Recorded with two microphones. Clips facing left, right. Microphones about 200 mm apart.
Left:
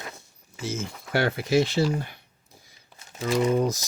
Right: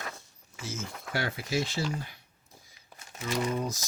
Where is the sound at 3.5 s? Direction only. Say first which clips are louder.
Left 9 dB; 80° left.